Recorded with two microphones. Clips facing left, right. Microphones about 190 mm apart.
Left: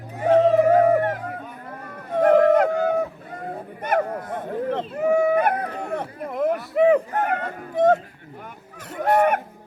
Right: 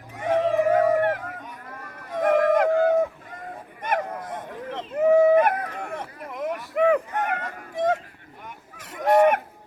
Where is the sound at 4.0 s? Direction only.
55° left (ahead or behind).